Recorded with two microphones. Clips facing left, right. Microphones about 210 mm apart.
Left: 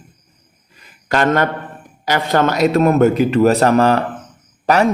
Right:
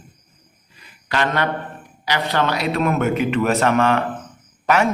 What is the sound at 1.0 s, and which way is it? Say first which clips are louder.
A man's voice: left 6 dB; 45° left (ahead or behind).